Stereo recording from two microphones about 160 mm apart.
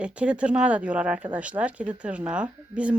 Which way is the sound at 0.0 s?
5° right (ahead or behind).